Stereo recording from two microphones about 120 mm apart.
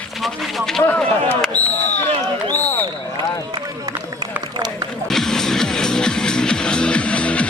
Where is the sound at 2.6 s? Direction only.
15° left (ahead or behind).